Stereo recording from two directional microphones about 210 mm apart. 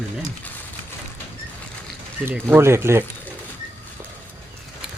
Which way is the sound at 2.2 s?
10° right (ahead or behind).